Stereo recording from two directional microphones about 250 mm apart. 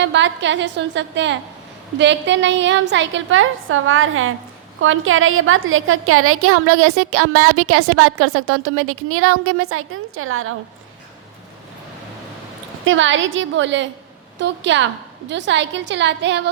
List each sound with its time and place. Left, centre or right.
0.0 s a woman's voice: right
12.8 s a woman's voice: right